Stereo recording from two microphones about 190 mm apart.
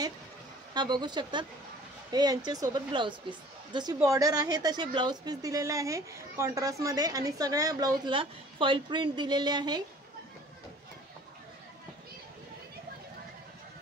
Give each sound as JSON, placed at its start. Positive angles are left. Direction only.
{"t": 0.7, "sound": "speech", "side_deg": -25}